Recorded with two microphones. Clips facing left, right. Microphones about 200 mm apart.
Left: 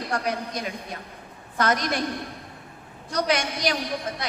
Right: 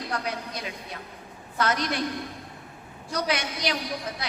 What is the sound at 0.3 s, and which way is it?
A woman's voice, 50° left (ahead or behind).